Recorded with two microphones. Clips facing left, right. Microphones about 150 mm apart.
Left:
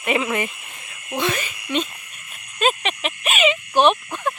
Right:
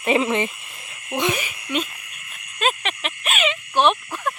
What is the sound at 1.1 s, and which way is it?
Frog, 15° right (ahead or behind).